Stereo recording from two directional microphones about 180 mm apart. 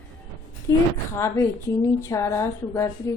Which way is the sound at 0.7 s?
15° left (ahead or behind).